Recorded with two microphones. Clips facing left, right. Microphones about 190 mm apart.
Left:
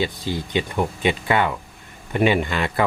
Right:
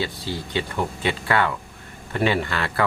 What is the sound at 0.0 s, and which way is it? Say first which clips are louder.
Speech: left 3 dB; 15° left (ahead or behind).